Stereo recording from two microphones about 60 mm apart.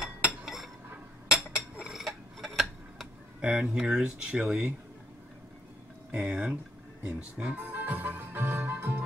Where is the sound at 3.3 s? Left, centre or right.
Centre.